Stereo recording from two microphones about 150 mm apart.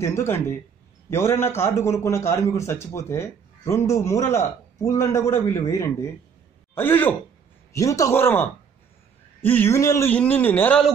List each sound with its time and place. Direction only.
0.0 s a man's voice: 20° left (ahead or behind)